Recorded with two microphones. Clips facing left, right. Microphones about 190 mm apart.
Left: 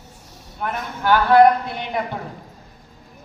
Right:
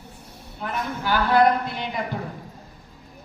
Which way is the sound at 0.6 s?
55° left (ahead or behind).